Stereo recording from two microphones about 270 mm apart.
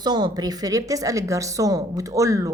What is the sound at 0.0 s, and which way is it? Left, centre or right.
A woman's voice, centre.